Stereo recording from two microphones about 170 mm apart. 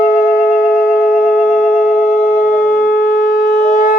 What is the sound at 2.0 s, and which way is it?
Shofar, 55° left (ahead or behind).